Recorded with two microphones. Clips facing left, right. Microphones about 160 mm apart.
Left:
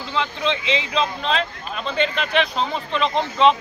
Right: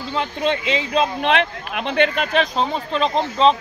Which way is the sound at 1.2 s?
70° right (ahead or behind).